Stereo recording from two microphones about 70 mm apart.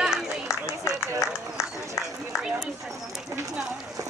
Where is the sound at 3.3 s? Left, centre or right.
Right.